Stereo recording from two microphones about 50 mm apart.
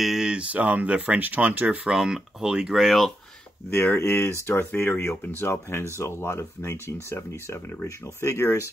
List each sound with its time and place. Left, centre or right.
0.2 s speech: right
2.0 s speech: centre
2.8 s speech: centre
3.7 s speech: left